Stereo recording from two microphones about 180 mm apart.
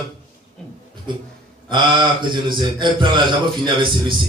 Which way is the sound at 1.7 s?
25° right (ahead or behind).